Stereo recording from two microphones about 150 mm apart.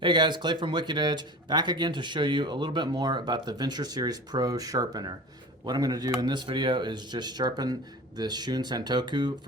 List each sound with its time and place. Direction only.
0.0 s speech: 30° right (ahead or behind)